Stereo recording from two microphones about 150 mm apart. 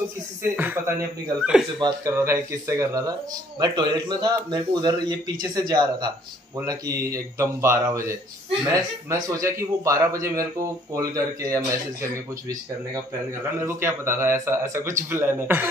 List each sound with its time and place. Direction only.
0.4 s a man's voice: 15° right (ahead or behind)
1.8 s a man's voice: 30° right (ahead or behind)
2.1 s a man's voice: 15° right (ahead or behind)
13.7 s a man's voice: 15° right (ahead or behind)